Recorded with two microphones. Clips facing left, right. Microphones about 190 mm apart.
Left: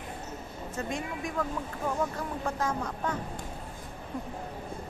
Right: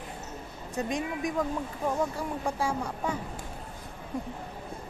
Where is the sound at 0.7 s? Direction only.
15° right (ahead or behind).